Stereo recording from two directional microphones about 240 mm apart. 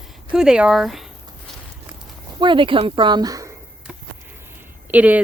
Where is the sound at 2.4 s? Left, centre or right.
Right.